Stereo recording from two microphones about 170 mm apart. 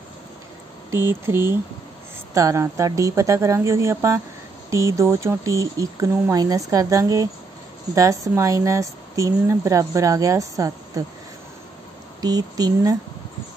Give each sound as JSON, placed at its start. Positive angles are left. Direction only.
{"t": 0.8, "sound": "speech", "side_deg": -15}
{"t": 12.2, "sound": "speech", "side_deg": -20}